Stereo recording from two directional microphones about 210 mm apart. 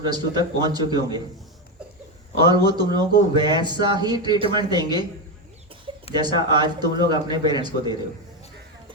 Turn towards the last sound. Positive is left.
turn(degrees=-20)  # may be behind; listen again after turning